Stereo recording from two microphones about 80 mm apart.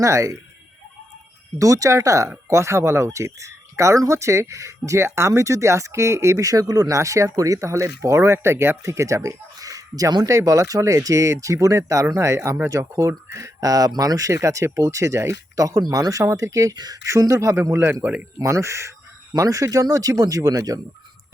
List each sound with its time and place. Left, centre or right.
0.0 s speech: right
1.5 s speech: right
10.2 s speech: right
16.7 s speech: right
17.1 s speech: right
18.0 s speech: centre
18.3 s speech: right